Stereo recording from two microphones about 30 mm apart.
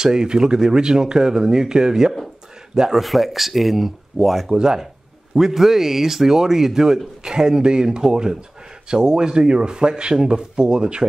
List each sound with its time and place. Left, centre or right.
0.0 s speech: right
2.9 s speech: centre
4.5 s speech: right
5.4 s speech: centre; by 11.1 s right